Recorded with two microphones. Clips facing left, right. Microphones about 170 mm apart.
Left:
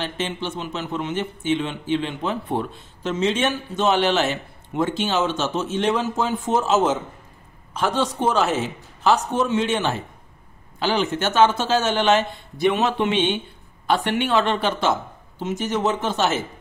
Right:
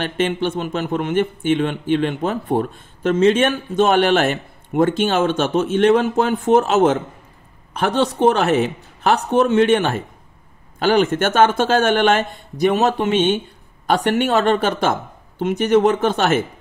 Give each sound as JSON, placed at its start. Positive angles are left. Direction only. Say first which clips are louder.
{"t": 0.0, "sound": "a man's voice", "louder": "right 7 dB", "side_deg": -55}